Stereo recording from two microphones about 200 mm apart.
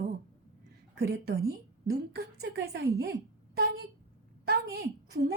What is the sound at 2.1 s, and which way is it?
Speech, 55° right (ahead or behind).